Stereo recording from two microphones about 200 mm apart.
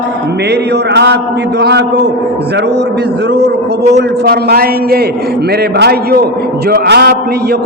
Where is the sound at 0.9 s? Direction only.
55° right (ahead or behind).